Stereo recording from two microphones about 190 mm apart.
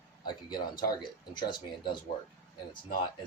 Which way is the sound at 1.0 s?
25° left (ahead or behind).